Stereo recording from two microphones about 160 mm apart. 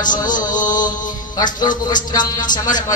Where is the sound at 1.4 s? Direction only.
25° left (ahead or behind).